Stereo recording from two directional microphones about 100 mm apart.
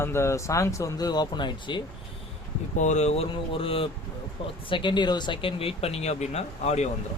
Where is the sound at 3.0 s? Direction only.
80° left; by 3.9 s 65° left (ahead or behind).